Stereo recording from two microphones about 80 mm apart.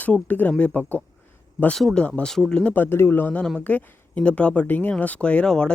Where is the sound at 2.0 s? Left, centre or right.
Centre.